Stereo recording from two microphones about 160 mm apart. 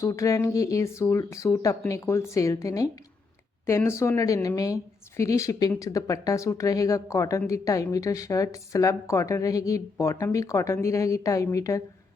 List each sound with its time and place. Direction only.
0.0 s speech: 20° left (ahead or behind)